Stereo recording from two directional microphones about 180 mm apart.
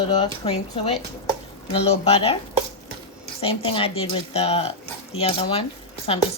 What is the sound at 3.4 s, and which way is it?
Speech, 30° left (ahead or behind).